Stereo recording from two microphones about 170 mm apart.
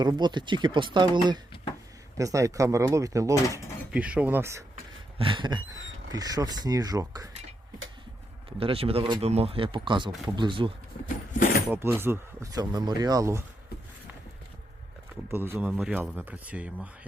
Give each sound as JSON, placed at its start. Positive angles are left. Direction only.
{"t": 0.0, "sound": "speech", "side_deg": -25}
{"t": 3.9, "sound": "speech", "side_deg": -5}
{"t": 5.1, "sound": "speech", "side_deg": -30}
{"t": 8.5, "sound": "speech", "side_deg": -35}
{"t": 11.0, "sound": "a sound", "side_deg": 50}
{"t": 11.7, "sound": "speech", "side_deg": -15}
{"t": 15.3, "sound": "speech", "side_deg": -15}